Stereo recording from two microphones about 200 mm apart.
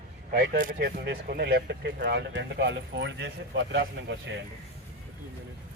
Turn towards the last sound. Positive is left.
turn(degrees=-60)  # may be behind; listen again after turning